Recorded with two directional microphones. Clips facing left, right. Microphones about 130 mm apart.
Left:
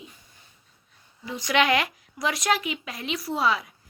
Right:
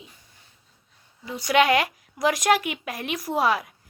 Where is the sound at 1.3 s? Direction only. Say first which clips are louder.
Right 3 dB; 40° right (ahead or behind).